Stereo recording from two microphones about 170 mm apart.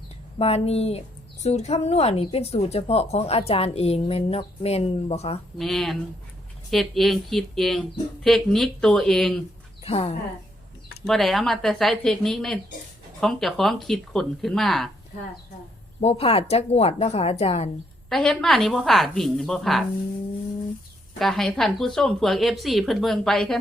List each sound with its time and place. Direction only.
0.3 s speech: 35° left (ahead or behind)
5.5 s speech: centre (ahead or behind)
9.8 s a woman's voice: 35° left (ahead or behind)
11.0 s speech: centre (ahead or behind)
16.0 s speech: 35° left (ahead or behind)
18.1 s speech: 5° left (ahead or behind)
21.2 s speech: centre (ahead or behind)